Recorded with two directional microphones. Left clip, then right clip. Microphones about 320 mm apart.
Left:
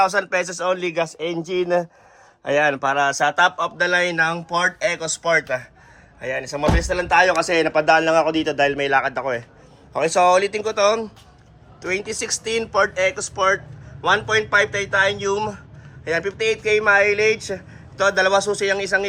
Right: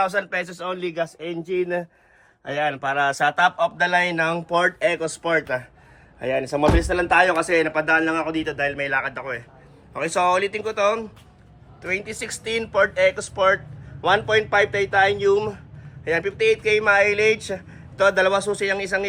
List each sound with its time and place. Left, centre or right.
0.0 s a man's voice: centre